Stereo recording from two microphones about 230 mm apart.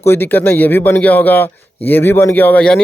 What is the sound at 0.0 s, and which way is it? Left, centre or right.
Speech, centre.